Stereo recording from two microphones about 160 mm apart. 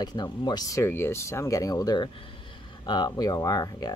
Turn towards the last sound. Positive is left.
turn(degrees=25)  # may be behind; listen again after turning